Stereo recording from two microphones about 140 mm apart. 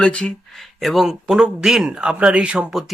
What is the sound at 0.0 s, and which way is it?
Speech, 5° left (ahead or behind).